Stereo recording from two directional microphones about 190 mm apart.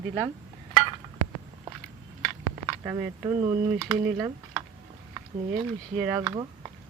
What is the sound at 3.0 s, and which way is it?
Speech, 25° right (ahead or behind).